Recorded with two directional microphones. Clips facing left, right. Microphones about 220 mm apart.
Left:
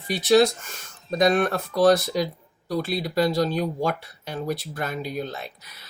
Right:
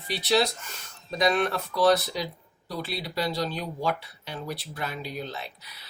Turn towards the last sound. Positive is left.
turn(degrees=50)  # may be behind; listen again after turning